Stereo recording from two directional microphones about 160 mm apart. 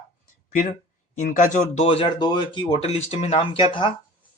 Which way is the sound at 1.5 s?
40° left (ahead or behind).